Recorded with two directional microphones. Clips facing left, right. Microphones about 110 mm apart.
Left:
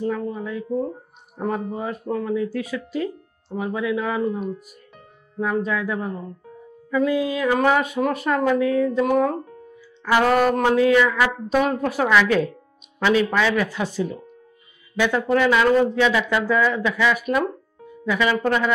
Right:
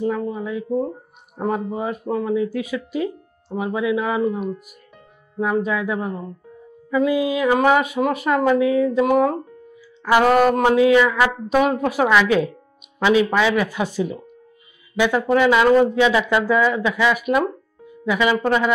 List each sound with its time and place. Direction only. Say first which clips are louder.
0.0 s speech: right 2 dB; 15° right (ahead or behind)